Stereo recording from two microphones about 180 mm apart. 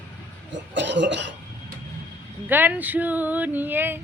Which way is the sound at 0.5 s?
80° right.